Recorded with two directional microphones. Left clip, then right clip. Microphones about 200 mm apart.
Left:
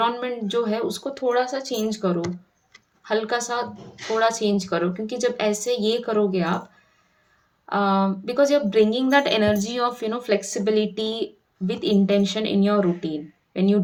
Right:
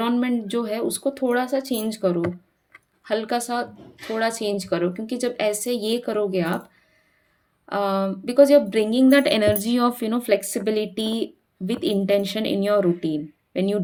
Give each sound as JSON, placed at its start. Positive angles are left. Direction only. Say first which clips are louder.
{"t": 0.0, "sound": "speech", "louder": "left 1 dB", "side_deg": -45}
{"t": 7.7, "sound": "speech", "louder": "left 2 dB", "side_deg": -45}